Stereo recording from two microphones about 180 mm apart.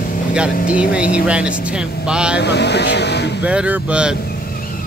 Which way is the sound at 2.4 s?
70° left (ahead or behind).